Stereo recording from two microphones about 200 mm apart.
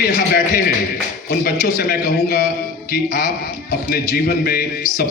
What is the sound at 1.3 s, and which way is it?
Speech, 50° left (ahead or behind).